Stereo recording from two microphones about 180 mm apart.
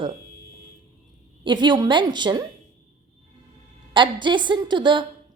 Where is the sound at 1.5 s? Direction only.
25° right (ahead or behind).